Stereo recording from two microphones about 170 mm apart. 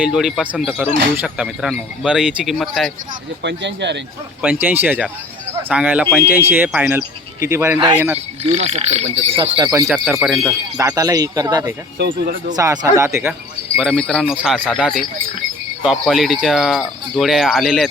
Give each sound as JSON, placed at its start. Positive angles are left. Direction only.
{"t": 0.0, "sound": "speech", "side_deg": -5}
{"t": 3.4, "sound": "speech", "side_deg": -90}
{"t": 4.6, "sound": "speech", "side_deg": -10}
{"t": 8.4, "sound": "speech", "side_deg": -45}
{"t": 9.4, "sound": "speech", "side_deg": -20}
{"t": 9.9, "sound": "speech", "side_deg": -5}
{"t": 10.8, "sound": "speech", "side_deg": -20}
{"t": 11.9, "sound": "speech", "side_deg": -80}
{"t": 12.5, "sound": "speech", "side_deg": -20}
{"t": 13.7, "sound": "speech", "side_deg": 5}